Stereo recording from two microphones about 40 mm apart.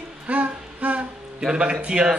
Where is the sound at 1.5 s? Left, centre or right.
Right.